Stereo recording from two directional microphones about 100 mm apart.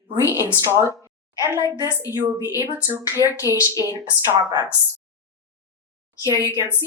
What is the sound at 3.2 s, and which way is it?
Speech, 35° left (ahead or behind).